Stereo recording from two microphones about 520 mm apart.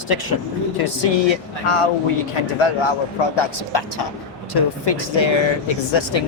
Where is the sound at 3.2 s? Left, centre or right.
Left.